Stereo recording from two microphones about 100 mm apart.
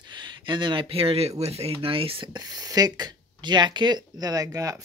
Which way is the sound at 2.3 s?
40° right (ahead or behind).